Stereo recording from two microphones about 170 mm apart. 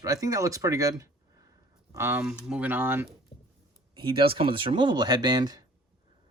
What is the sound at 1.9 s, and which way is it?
Speech, 15° right (ahead or behind).